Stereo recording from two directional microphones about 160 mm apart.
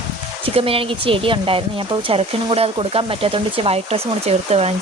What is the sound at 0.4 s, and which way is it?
Speech, 35° right (ahead or behind).